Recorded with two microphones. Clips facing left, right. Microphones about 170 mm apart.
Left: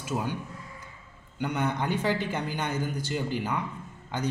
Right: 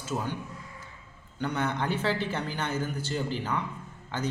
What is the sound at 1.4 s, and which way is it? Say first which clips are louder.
A man's voice: left 1 dB; 10° left (ahead or behind).